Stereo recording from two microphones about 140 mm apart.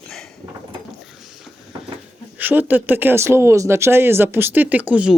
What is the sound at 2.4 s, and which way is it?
Speech, 15° right (ahead or behind).